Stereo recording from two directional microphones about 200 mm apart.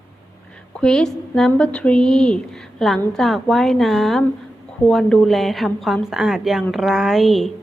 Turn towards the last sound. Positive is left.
turn(degrees=0)  # may be behind; listen again after turning